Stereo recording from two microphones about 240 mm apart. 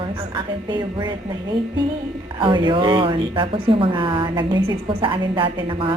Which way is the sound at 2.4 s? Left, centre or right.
Centre.